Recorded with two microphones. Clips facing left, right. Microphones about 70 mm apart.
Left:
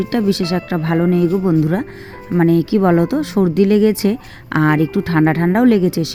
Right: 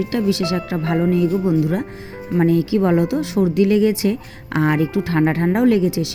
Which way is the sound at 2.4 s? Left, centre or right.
Left.